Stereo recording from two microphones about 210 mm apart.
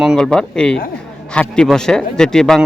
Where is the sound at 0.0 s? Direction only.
Centre (ahead or behind).